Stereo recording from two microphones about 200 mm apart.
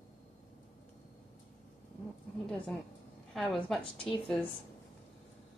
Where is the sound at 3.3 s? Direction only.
5° left (ahead or behind).